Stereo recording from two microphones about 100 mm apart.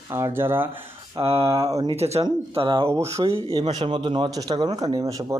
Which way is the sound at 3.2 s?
70° right (ahead or behind).